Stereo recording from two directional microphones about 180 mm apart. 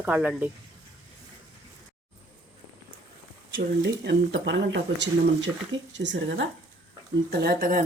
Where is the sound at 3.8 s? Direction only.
70° right (ahead or behind).